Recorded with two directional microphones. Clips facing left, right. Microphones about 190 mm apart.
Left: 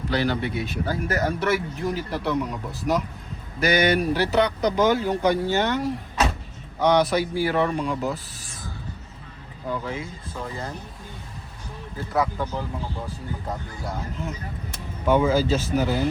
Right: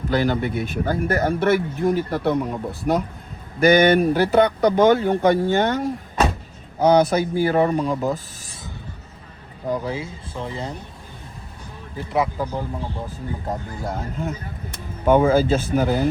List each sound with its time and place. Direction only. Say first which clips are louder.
0.1 s speech: right 4 dB; 45° right (ahead or behind)
9.6 s speech: right 4 dB; 35° right (ahead or behind)
12.1 s speech: right 2 dB; 30° right (ahead or behind)
15.0 s speech: right 4 dB; 50° right (ahead or behind)